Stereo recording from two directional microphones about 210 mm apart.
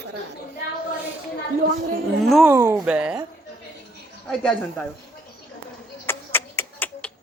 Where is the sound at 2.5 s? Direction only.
15° right (ahead or behind).